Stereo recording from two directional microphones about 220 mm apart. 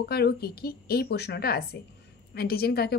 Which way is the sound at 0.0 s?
45° left (ahead or behind).